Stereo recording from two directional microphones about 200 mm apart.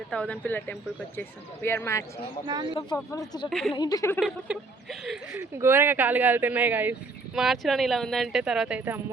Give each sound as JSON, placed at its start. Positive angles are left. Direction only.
{"t": 0.1, "sound": "speech", "side_deg": 5}
{"t": 4.2, "sound": "speech", "side_deg": 0}
{"t": 5.3, "sound": "speech", "side_deg": -15}